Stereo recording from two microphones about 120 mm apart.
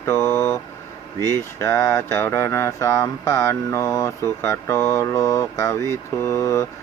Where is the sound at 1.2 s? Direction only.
20° left (ahead or behind).